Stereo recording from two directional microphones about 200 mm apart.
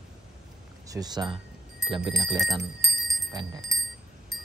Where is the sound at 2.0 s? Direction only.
Centre (ahead or behind).